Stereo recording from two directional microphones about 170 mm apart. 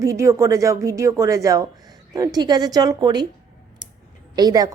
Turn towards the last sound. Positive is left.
turn(degrees=-20)  # may be behind; listen again after turning